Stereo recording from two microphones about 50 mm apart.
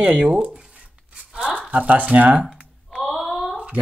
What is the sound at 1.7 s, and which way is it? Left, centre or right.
Speech, right.